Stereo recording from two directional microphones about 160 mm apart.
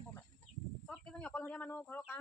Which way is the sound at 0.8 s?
5° left (ahead or behind).